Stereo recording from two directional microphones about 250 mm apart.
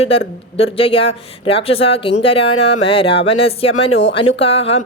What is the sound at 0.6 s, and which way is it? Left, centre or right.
Speech, left.